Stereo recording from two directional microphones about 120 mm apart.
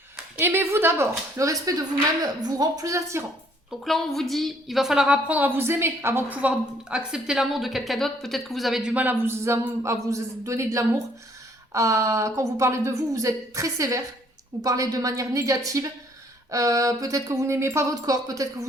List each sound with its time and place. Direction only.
0.3 s a woman's voice: 20° right (ahead or behind)
3.8 s a woman's voice: centre (ahead or behind); by 18.4 s 30° right (ahead or behind)